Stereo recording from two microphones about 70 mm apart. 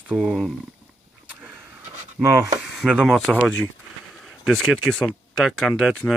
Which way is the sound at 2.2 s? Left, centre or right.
Centre.